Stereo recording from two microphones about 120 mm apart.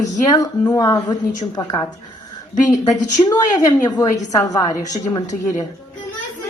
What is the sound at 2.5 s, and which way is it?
Speech, 90° left.